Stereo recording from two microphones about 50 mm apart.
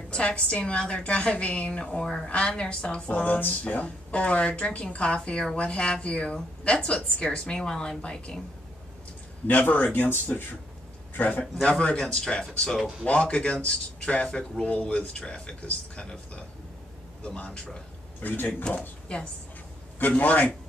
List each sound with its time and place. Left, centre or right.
0.2 s a woman's voice: left
3.3 s a man's voice: left
3.6 s a woman's voice: left
9.5 s a man's voice: left
11.6 s a woman's voice: left
18.2 s a man's voice: left
18.8 s speech: centre
20.0 s a man's voice: left